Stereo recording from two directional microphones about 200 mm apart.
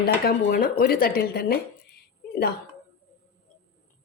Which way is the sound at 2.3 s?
50° left (ahead or behind).